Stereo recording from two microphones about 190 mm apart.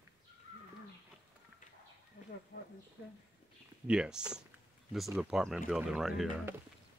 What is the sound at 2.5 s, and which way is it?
Speech, 65° left (ahead or behind).